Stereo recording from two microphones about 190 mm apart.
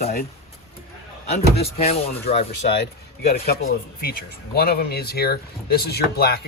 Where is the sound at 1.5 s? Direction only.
30° left (ahead or behind).